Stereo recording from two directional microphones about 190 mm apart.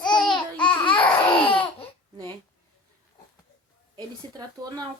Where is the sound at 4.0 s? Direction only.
20° right (ahead or behind).